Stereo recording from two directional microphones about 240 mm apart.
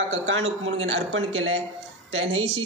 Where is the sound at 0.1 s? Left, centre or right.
Right.